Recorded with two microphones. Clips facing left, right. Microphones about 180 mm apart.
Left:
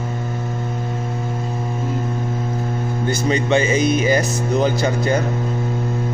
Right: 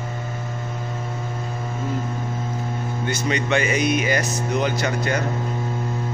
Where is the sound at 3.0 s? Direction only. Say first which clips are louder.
Left 5 dB; 35° left (ahead or behind).